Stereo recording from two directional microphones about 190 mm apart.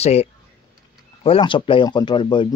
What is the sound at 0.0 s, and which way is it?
Speech, 35° left (ahead or behind).